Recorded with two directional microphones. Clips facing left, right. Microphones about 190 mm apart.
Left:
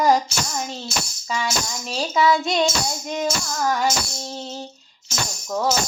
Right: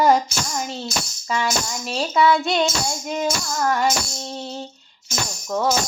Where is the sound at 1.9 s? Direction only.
Centre (ahead or behind).